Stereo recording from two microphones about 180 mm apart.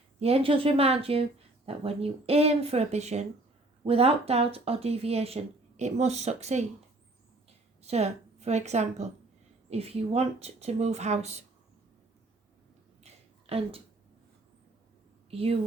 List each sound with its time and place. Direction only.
0.2 s speech: 35° right (ahead or behind)
7.8 s a woman's voice: 35° right (ahead or behind)
13.0 s a sound: 35° right (ahead or behind)
15.3 s a woman's voice: 35° right (ahead or behind)